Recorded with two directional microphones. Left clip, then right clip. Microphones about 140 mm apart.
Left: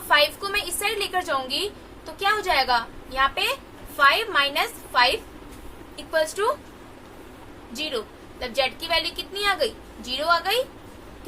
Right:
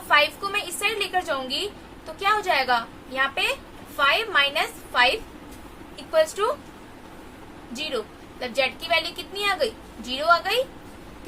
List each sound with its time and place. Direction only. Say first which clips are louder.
0.1 s a sound: even; 20° left (ahead or behind)
2.1 s a woman's voice: even; 15° left (ahead or behind)
7.7 s a woman's voice: even; 15° left (ahead or behind)